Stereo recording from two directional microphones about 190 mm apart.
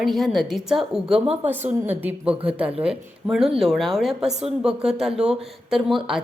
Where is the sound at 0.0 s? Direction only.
Centre (ahead or behind).